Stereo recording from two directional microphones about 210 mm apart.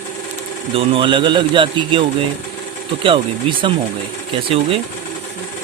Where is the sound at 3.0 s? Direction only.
25° right (ahead or behind).